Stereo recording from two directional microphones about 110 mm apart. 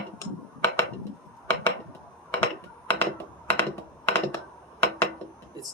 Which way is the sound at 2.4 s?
15° left (ahead or behind).